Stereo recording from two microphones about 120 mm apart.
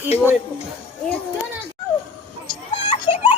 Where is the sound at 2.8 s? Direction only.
45° left (ahead or behind).